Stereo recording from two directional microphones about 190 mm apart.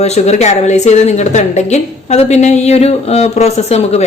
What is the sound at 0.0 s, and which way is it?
Speech, 35° left (ahead or behind).